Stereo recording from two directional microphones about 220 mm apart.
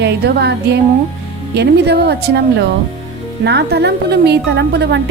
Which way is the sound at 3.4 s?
50° right (ahead or behind).